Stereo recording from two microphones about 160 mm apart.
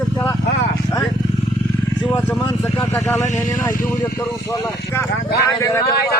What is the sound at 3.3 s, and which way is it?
Speech, 15° left (ahead or behind).